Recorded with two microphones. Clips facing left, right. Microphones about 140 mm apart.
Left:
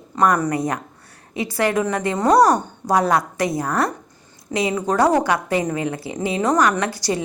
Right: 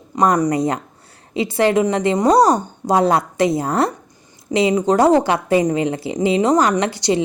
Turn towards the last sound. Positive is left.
turn(degrees=-25)  # may be behind; listen again after turning